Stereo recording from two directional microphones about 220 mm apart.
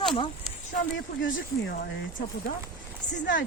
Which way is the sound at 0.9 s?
60° left (ahead or behind).